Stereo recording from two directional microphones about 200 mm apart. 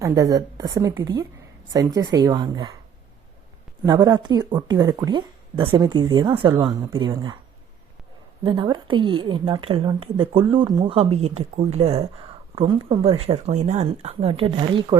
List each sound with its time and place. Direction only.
0.0 s a woman's voice: 15° right (ahead or behind)
3.8 s a woman's voice: 20° right (ahead or behind)
8.4 s a woman's voice: 20° right (ahead or behind)